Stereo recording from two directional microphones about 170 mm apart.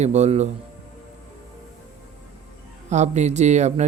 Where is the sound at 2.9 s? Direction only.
40° right (ahead or behind).